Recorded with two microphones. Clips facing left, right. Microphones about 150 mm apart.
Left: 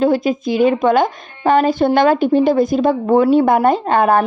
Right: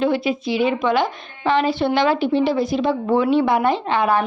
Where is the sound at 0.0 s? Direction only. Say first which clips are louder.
Left 5 dB; 45° left (ahead or behind).